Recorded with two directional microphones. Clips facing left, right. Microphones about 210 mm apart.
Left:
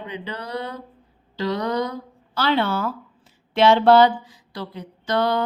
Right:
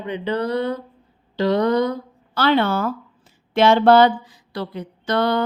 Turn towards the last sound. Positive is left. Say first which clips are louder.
# right 2 dB
turn(degrees=-60)  # may be behind; listen again after turning